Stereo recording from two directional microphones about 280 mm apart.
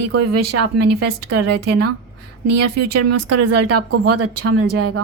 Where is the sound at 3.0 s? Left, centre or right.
Right.